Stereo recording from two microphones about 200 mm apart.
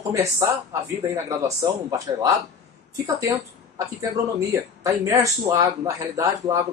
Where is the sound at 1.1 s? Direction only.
15° right (ahead or behind).